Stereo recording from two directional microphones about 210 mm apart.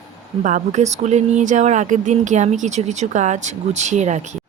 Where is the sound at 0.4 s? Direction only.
35° right (ahead or behind).